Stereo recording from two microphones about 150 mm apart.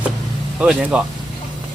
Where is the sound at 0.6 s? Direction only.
5° right (ahead or behind).